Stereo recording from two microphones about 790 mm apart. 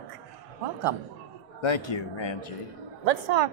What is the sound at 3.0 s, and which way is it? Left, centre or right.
Speech, right.